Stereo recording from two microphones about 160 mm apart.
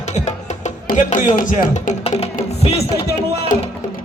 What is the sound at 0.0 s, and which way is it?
Speech, 45° left (ahead or behind).